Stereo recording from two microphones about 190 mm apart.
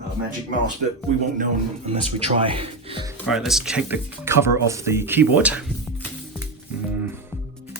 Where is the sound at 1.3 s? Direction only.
45° right (ahead or behind).